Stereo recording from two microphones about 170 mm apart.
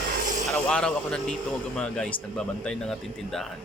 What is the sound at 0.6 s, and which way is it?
Speech, 5° left (ahead or behind).